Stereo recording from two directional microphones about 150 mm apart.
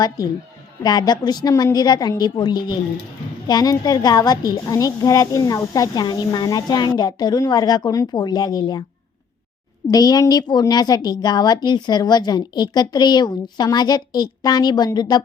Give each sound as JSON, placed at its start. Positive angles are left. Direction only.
{"t": 0.8, "sound": "a woman's voice", "side_deg": 25}
{"t": 9.9, "sound": "a woman's voice", "side_deg": 25}